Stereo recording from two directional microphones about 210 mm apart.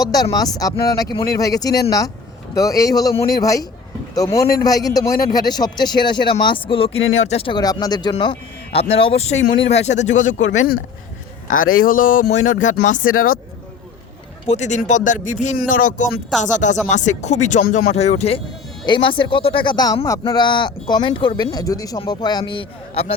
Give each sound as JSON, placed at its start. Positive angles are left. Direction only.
{"t": 0.1, "sound": "speech", "side_deg": 20}
{"t": 9.4, "sound": "speech", "side_deg": 60}
{"t": 9.7, "sound": "speech", "side_deg": 35}
{"t": 11.5, "sound": "speech", "side_deg": 75}
{"t": 11.9, "sound": "speech", "side_deg": 40}
{"t": 14.4, "sound": "speech", "side_deg": 35}